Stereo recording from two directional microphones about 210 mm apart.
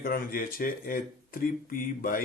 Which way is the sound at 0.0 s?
45° left (ahead or behind).